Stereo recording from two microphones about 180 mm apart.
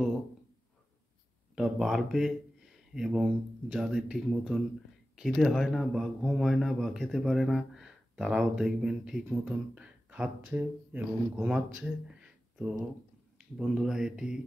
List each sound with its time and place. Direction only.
1.5 s speech: centre (ahead or behind)
13.4 s speech: 5° right (ahead or behind)